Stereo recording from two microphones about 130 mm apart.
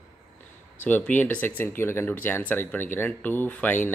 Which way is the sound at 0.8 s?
10° left (ahead or behind).